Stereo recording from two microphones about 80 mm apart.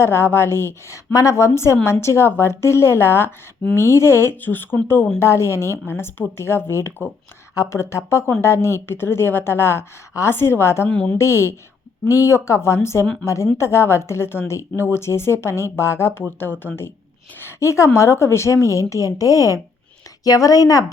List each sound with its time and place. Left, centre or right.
0.0 s speech: left
10.8 s a woman's voice: centre
11.2 s a woman's voice: left